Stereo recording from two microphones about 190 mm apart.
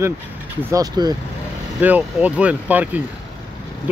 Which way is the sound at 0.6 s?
15° right (ahead or behind).